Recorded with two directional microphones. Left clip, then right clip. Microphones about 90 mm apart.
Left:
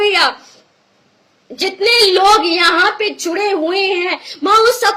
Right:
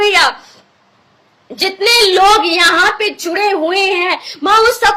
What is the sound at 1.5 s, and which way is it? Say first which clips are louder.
A child's voice: right 1 dB; 35° left (ahead or behind).